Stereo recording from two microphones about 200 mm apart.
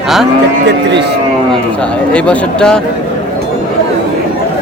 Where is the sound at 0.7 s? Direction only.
60° right (ahead or behind).